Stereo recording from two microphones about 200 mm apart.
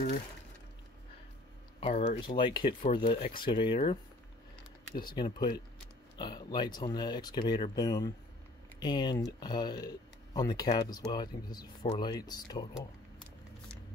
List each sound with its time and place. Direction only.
1.8 s speech: 30° left (ahead or behind)